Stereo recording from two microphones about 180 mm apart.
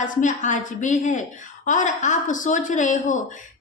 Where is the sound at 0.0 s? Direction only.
45° left (ahead or behind).